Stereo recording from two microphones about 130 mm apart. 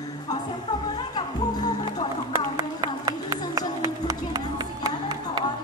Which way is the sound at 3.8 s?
30° right (ahead or behind).